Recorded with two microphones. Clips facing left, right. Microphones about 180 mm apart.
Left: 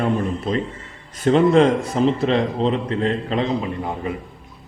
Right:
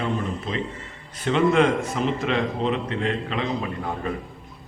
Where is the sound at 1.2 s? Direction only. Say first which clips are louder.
Left 5 dB; 35° left (ahead or behind).